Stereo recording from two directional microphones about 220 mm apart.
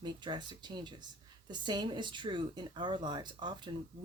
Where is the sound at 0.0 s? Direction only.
20° right (ahead or behind).